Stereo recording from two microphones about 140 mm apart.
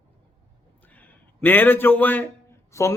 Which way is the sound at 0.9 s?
15° left (ahead or behind).